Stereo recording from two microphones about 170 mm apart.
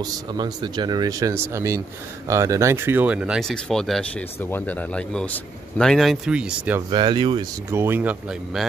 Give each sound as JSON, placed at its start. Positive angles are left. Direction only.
{"t": 0.0, "sound": "speech", "side_deg": -25}
{"t": 6.9, "sound": "speech", "side_deg": -25}
{"t": 7.7, "sound": "speech", "side_deg": -15}